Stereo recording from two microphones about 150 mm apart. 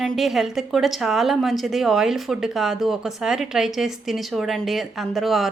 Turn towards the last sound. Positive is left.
turn(degrees=0)  # may be behind; listen again after turning